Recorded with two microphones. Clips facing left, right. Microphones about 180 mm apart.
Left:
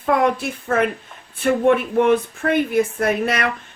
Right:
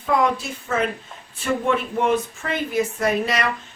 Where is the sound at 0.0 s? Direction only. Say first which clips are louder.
Left 3 dB; 55° left (ahead or behind).